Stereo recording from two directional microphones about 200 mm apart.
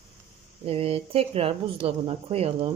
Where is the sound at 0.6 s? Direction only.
30° right (ahead or behind).